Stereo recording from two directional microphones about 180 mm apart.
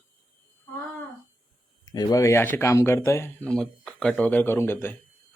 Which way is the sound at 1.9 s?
20° left (ahead or behind).